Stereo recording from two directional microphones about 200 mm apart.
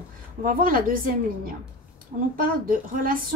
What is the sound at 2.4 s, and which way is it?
Speech, 45° right (ahead or behind).